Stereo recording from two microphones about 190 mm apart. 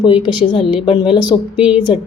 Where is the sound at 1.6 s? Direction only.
5° right (ahead or behind).